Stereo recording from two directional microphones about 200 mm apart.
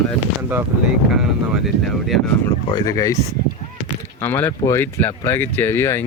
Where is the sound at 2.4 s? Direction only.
15° left (ahead or behind).